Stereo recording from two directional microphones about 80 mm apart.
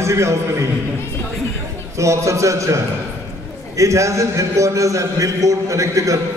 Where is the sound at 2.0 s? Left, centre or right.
Right.